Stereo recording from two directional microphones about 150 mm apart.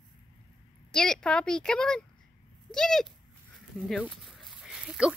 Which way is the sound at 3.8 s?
5° left (ahead or behind).